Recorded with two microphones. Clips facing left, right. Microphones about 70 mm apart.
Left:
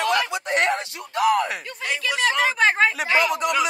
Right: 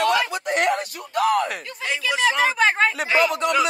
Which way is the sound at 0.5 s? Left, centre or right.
Left.